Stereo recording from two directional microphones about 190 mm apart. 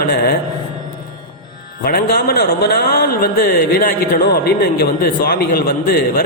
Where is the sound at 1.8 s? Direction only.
50° left (ahead or behind).